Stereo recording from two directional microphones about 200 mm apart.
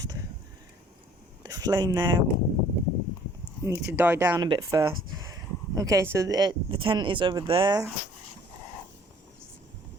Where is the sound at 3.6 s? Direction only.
15° right (ahead or behind).